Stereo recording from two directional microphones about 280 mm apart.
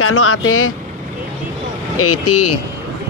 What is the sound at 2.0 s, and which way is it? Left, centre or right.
Speech, left.